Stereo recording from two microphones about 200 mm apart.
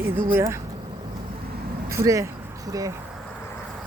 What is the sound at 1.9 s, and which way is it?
Speech, 15° right (ahead or behind).